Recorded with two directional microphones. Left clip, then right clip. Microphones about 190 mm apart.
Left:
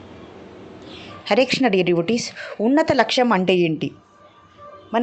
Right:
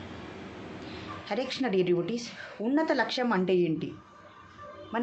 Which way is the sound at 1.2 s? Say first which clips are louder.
Left 14 dB; 45° left (ahead or behind).